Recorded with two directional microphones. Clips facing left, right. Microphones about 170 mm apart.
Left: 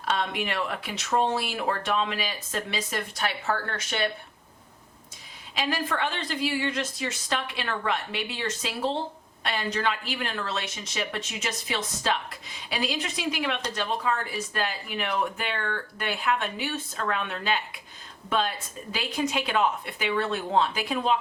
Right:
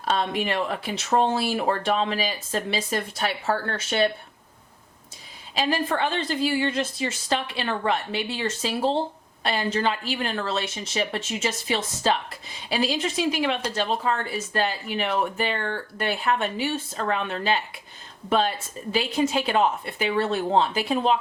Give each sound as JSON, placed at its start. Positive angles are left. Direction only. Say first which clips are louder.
{"t": 0.1, "sound": "speech", "louder": "right 4 dB", "side_deg": -30}
{"t": 5.5, "sound": "speech", "louder": "right 4 dB", "side_deg": -30}